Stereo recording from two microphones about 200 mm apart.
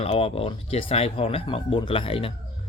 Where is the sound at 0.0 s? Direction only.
30° left (ahead or behind).